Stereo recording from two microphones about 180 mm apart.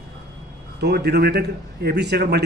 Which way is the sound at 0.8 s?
65° right (ahead or behind).